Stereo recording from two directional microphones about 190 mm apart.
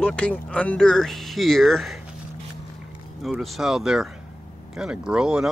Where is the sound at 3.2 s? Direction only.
Centre (ahead or behind).